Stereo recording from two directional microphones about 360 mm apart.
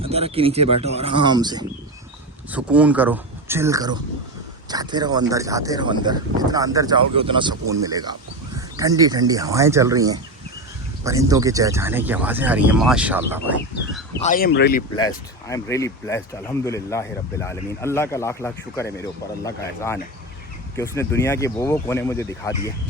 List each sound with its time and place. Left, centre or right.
0.0 s speech: centre
14.2 s speech: left
14.9 s speech: centre